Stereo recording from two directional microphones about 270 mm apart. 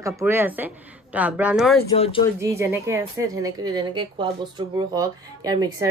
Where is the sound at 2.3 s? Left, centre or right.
Centre.